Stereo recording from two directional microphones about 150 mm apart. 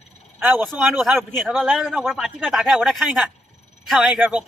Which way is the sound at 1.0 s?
Centre (ahead or behind).